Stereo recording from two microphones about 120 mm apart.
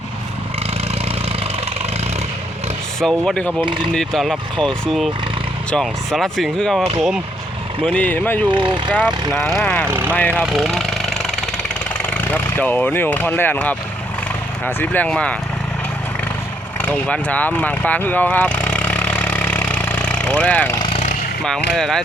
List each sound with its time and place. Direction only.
3.0 s speech: 5° left (ahead or behind)
7.9 s speech: 10° left (ahead or behind)
8.4 s speech: 40° right (ahead or behind)
8.9 s speech: 10° right (ahead or behind)
9.4 s speech: 5° left (ahead or behind)
9.8 s speech: 20° right (ahead or behind)
10.1 s speech: 10° left (ahead or behind)
10.3 s engine: 5° right (ahead or behind); by 13.7 s 15° left (ahead or behind)
14.6 s speech: 15° left (ahead or behind)
16.8 s vehicle: 15° left (ahead or behind)
20.9 s vehicle: 80° left
21.4 s speech: 5° left (ahead or behind)